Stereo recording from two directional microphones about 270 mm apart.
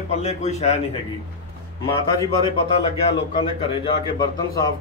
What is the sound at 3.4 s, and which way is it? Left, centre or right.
A man's voice, centre.